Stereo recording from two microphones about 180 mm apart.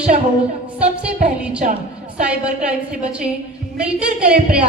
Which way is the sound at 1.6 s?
45° right (ahead or behind).